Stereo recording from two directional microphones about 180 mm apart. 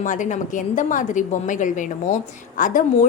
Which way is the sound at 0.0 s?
45° left (ahead or behind).